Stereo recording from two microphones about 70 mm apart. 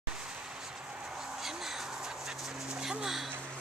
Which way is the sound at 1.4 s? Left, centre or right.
Centre.